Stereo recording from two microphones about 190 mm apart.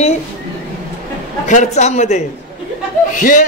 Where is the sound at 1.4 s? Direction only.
40° left (ahead or behind).